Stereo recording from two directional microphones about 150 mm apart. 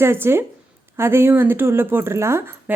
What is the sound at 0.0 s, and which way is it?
A woman's voice, 15° right (ahead or behind).